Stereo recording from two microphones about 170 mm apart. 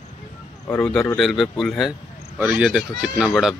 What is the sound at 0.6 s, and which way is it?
Speech, 10° left (ahead or behind).